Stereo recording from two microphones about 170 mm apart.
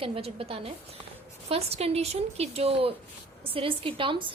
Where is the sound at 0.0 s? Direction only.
35° right (ahead or behind).